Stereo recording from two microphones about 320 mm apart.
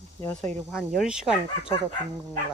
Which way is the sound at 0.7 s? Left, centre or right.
Centre.